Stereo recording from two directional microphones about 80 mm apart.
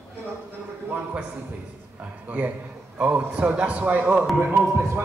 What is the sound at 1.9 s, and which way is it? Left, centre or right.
A man's voice, centre.